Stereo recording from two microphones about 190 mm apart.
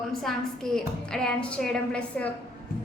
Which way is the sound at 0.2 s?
Centre (ahead or behind).